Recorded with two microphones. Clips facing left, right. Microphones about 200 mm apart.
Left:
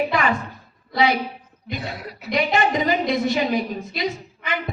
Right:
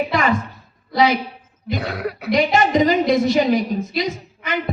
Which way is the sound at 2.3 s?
45° right (ahead or behind).